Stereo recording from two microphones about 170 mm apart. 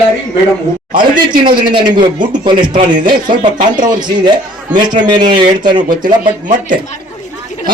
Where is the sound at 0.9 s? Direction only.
25° right (ahead or behind).